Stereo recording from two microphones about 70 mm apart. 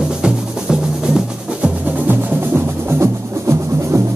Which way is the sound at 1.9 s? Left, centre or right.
Right.